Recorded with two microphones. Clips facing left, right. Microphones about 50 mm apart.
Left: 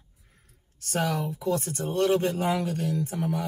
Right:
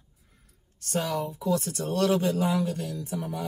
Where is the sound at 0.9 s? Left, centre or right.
Left.